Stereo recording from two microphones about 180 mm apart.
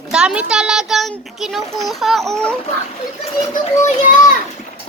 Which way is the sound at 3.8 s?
45° left (ahead or behind).